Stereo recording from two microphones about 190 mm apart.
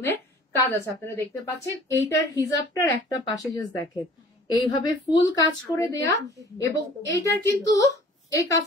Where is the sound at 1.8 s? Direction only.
15° left (ahead or behind).